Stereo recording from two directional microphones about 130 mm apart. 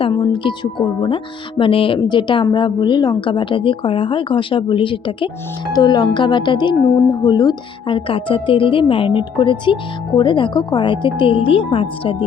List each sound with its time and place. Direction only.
0.0 s speech: 35° left (ahead or behind)